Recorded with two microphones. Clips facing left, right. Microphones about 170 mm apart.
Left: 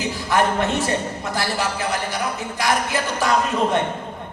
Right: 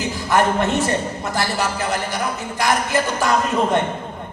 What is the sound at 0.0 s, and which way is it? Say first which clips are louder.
A man's voice: right 2 dB; 50° right (ahead or behind).